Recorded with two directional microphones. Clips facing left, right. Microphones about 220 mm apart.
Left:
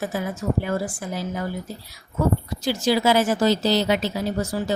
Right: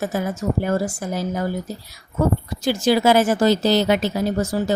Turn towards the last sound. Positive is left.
turn(degrees=-45)  # may be behind; listen again after turning